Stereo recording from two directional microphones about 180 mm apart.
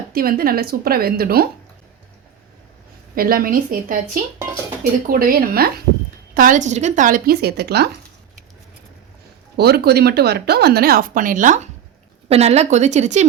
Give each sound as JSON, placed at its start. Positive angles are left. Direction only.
{"t": 0.1, "sound": "a woman's voice", "side_deg": -55}
{"t": 3.2, "sound": "a woman's voice", "side_deg": -55}
{"t": 9.6, "sound": "a woman's voice", "side_deg": -65}